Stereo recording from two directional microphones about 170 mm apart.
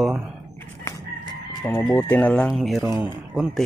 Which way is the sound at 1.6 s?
10° left (ahead or behind).